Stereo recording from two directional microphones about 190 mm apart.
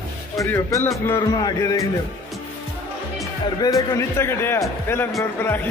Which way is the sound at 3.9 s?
15° left (ahead or behind).